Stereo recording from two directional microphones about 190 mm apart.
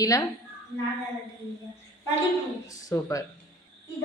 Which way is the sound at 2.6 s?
15° left (ahead or behind).